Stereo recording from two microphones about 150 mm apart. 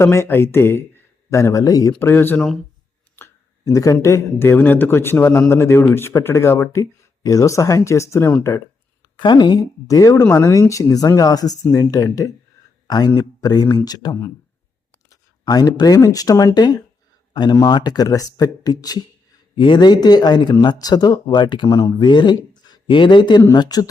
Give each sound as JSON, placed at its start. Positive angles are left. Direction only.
{"t": 0.0, "sound": "speech", "side_deg": 15}
{"t": 3.2, "sound": "a sound", "side_deg": 20}
{"t": 4.0, "sound": "speech", "side_deg": 20}